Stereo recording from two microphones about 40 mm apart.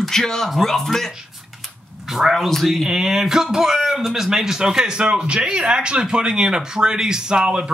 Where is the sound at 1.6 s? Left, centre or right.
Centre.